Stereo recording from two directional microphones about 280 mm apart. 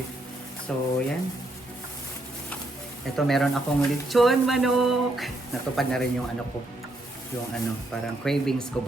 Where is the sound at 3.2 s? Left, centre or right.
Centre.